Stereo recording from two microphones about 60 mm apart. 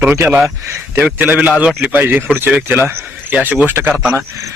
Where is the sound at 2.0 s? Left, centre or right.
Right.